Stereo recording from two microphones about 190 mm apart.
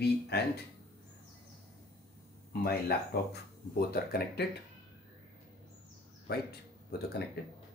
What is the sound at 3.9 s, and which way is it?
Speech, 55° left (ahead or behind).